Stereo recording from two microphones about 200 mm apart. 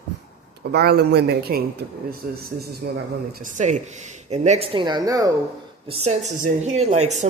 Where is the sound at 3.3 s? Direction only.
40° right (ahead or behind); by 5.3 s 15° right (ahead or behind).